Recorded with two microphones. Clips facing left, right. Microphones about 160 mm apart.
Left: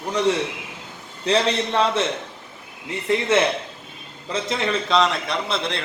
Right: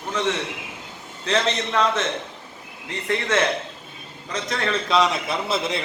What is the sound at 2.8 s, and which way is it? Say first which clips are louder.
Speech: left 4 dB; 10° left (ahead or behind).